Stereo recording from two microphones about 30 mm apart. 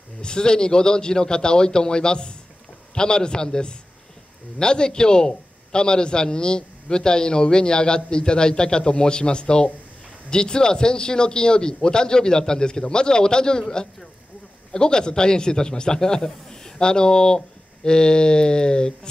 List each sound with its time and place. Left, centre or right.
0.2 s a man's voice: left